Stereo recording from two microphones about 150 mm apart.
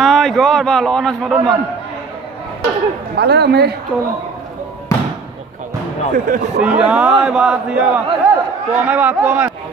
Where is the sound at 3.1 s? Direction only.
90° right.